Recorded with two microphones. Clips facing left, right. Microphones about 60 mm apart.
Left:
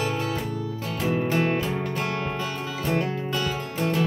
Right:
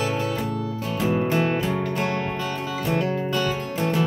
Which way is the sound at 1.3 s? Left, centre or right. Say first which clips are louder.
Right 1 dB; centre.